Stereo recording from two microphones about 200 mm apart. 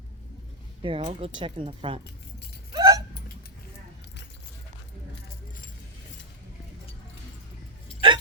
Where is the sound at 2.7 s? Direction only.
20° right (ahead or behind).